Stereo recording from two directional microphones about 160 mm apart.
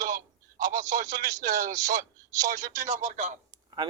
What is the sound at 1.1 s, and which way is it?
Speech, 20° right (ahead or behind).